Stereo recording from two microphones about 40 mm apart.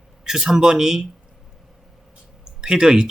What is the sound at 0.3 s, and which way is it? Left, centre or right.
Speech, centre.